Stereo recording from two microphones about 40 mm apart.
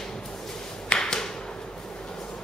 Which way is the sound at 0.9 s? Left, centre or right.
Centre.